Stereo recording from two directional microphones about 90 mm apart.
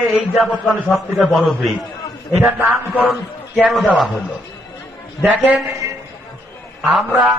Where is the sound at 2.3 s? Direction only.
25° right (ahead or behind).